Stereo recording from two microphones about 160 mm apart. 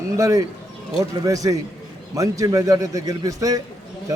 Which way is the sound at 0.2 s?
20° right (ahead or behind).